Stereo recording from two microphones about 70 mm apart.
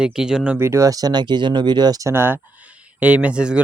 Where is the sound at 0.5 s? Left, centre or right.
Right.